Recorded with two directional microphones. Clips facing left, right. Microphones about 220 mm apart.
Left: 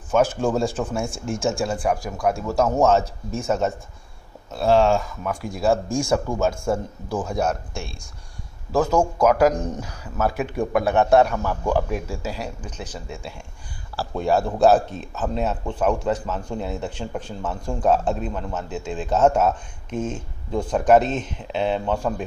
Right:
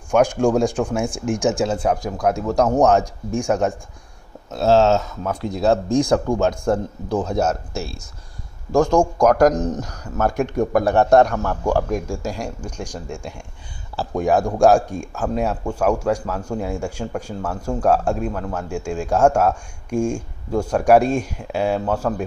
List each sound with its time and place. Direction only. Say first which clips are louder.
0.2 s a man's voice: right 5 dB; 15° right (ahead or behind)
7.3 s speech: right 3 dB; 5° right (ahead or behind)
8.7 s speech: right 4 dB; 5° left (ahead or behind)
10.6 s speech: right 2 dB; 40° right (ahead or behind)
12.1 s a man's voice: right 3 dB; 10° right (ahead or behind)